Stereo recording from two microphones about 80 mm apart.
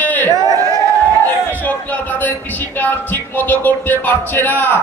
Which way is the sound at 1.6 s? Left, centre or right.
Left.